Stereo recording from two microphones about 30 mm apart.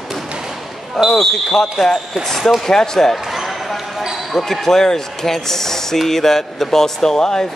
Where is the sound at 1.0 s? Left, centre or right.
Centre.